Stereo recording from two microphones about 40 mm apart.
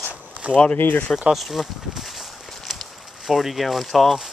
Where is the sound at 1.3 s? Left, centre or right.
Centre.